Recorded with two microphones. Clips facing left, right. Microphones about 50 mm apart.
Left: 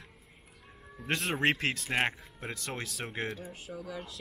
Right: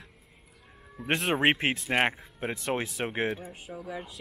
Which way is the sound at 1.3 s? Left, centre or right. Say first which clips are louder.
Right 4 dB; right.